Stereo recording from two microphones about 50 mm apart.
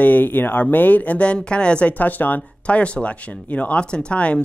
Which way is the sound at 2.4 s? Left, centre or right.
Left.